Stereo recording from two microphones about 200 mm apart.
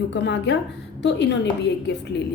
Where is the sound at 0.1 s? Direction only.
60° left (ahead or behind).